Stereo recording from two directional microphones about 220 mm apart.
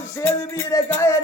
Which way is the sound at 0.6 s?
15° left (ahead or behind).